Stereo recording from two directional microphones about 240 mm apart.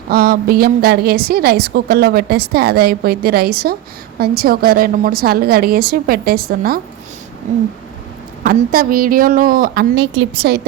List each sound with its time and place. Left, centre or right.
0.1 s a woman's voice: right
7.4 s a sound: right
8.4 s a woman's voice: right